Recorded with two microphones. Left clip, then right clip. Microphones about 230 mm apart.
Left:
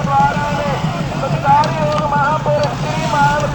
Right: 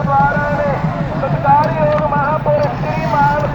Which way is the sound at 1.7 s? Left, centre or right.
Left.